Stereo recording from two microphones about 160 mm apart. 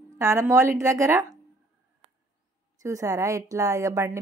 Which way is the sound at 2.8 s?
20° right (ahead or behind).